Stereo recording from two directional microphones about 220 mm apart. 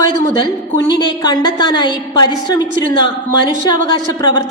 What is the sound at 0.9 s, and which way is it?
A woman's voice, 20° left (ahead or behind).